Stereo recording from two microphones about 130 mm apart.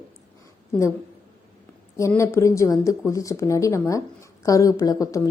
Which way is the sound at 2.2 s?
20° left (ahead or behind).